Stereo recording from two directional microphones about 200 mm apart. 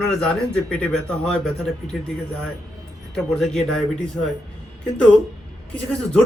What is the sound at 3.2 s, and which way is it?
Speech, centre (ahead or behind).